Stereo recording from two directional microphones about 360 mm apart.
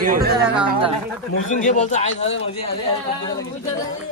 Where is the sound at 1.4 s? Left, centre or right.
Left.